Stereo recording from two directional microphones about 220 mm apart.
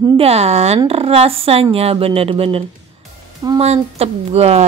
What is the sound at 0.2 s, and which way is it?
Speech, 30° right (ahead or behind).